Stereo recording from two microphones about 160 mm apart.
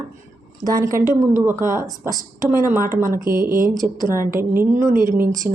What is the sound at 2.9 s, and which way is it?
Speech, 55° right (ahead or behind).